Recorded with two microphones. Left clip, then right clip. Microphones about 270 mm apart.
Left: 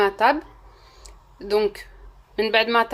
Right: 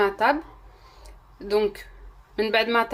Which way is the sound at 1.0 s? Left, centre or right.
Centre.